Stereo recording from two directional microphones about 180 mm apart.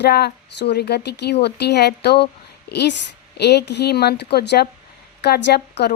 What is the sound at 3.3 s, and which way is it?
A woman's voice, 65° left (ahead or behind).